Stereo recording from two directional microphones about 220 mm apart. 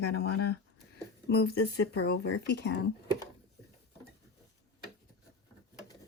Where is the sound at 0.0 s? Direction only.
45° left (ahead or behind).